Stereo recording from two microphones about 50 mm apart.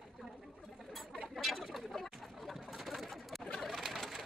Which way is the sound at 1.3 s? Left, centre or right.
Centre.